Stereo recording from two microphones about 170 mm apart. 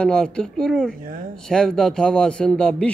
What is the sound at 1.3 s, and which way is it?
A man's voice, 5° left (ahead or behind).